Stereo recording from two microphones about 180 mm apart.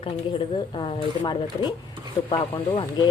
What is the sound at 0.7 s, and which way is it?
Speech, 30° left (ahead or behind).